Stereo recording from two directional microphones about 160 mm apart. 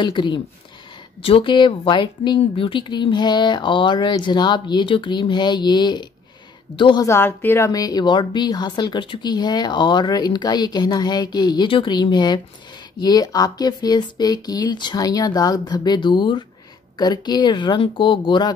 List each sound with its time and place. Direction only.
0.0 s a woman's voice: 30° left (ahead or behind)
7.1 s a woman's voice: 15° left (ahead or behind); by 18.5 s 30° left (ahead or behind)